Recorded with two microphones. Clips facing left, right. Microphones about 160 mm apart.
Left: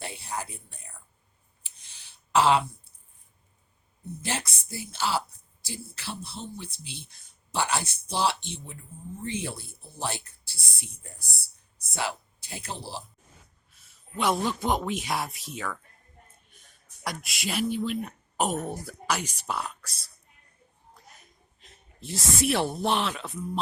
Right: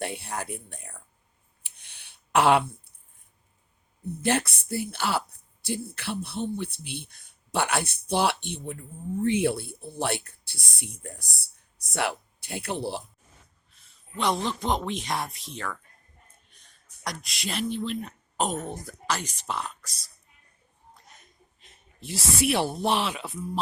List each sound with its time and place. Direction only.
0.0 s a sound: 60° right (ahead or behind)
4.2 s speech: 60° right (ahead or behind)
14.2 s speech: 5° left (ahead or behind)
17.0 s speech: 5° left (ahead or behind)
21.6 s speech: centre (ahead or behind)